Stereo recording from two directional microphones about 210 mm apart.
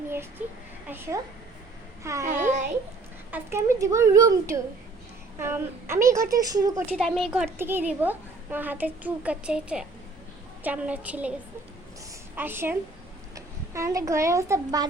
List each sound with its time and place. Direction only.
0.9 s a child's voice: 10° right (ahead or behind)
2.2 s a child's voice: 35° right (ahead or behind)
3.3 s a child's voice: 10° right (ahead or behind)
6.7 s a child's voice: centre (ahead or behind)
7.6 s a child's voice: 10° right (ahead or behind)
12.4 s a child's voice: 10° right (ahead or behind)